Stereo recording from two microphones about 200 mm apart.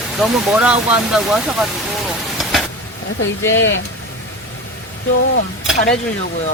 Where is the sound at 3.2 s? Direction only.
70° left (ahead or behind).